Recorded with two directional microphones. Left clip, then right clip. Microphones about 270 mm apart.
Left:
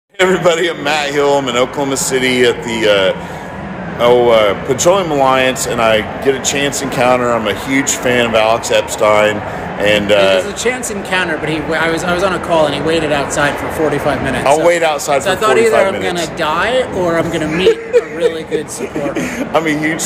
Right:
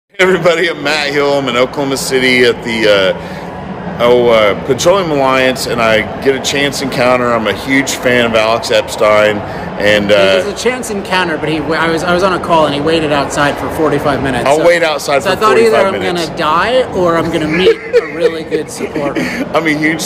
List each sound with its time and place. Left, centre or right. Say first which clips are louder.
0.2 s speech: right 2 dB; centre
10.6 s speech: right 2 dB; centre
14.4 s speech: right 1 dB; centre
15.2 s speech: right 3 dB; centre
17.9 s speech: right 2 dB; centre